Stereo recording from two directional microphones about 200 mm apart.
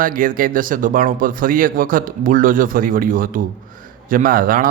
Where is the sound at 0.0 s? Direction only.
45° right (ahead or behind).